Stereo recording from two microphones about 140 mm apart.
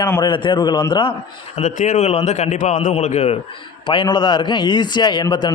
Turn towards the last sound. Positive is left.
turn(degrees=30)  # may be behind; listen again after turning